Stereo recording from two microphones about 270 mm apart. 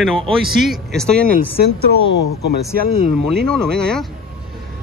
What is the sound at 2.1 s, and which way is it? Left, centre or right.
Speech, left.